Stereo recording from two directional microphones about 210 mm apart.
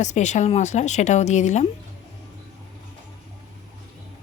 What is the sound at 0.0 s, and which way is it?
Speech, 35° left (ahead or behind).